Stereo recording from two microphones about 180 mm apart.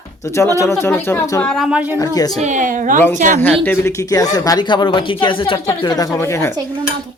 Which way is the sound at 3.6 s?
10° left (ahead or behind).